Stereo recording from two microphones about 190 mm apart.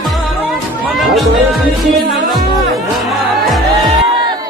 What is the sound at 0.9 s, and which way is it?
Music, centre (ahead or behind).